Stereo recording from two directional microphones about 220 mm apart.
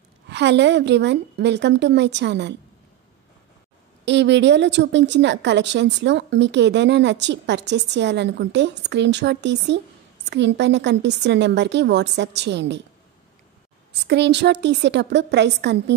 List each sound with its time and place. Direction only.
0.3 s a woman's voice: 50° right (ahead or behind)
4.0 s a woman's voice: 55° right (ahead or behind)
14.0 s a woman's voice: 50° right (ahead or behind)